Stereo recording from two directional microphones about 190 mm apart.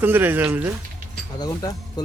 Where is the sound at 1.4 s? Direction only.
20° left (ahead or behind).